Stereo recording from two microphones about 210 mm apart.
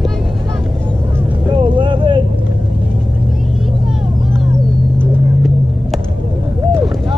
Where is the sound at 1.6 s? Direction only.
25° right (ahead or behind).